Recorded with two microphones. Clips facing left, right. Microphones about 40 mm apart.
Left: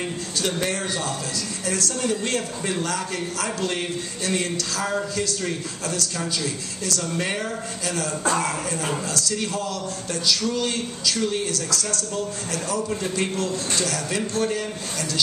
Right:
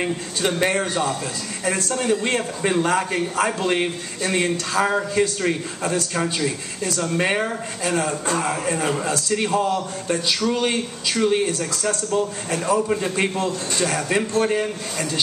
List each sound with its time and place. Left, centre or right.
0.0 s a man's voice: right